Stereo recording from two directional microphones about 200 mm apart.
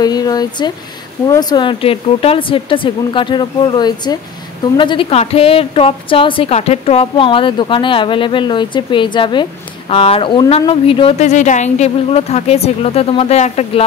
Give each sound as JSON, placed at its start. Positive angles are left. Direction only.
{"t": 0.0, "sound": "a woman's voice", "side_deg": 20}